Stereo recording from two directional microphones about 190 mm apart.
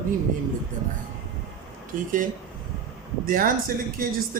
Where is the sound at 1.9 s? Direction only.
45° right (ahead or behind).